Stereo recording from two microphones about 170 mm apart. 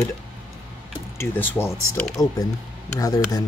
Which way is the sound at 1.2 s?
10° left (ahead or behind).